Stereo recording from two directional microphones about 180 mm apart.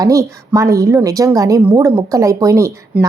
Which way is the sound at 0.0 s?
20° right (ahead or behind).